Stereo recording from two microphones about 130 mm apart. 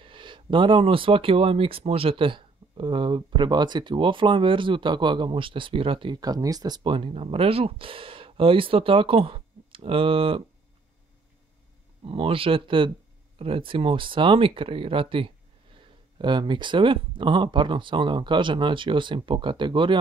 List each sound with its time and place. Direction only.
0.0 s speech: 40° right (ahead or behind)
12.1 s speech: 45° right (ahead or behind)